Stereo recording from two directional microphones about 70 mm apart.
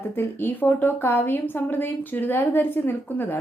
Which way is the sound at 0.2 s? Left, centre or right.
Left.